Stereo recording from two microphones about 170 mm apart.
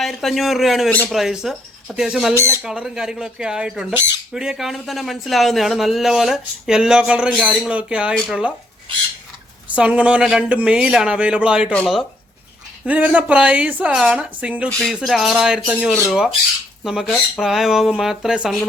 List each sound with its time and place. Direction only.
0.0 s speech: centre (ahead or behind)
2.3 s speech: 15° right (ahead or behind)
2.6 s speech: 5° right (ahead or behind)
9.6 s speech: 5° right (ahead or behind)
14.7 s speech: 5° left (ahead or behind)